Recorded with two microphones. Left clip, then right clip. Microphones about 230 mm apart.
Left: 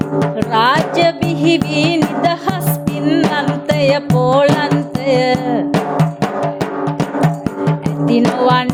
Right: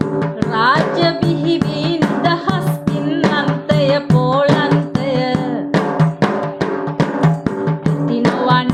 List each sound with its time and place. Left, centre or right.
0.2 s music: left
7.9 s music: left